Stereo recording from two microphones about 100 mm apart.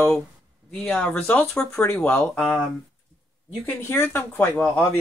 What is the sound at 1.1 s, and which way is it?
Speech, 20° left (ahead or behind).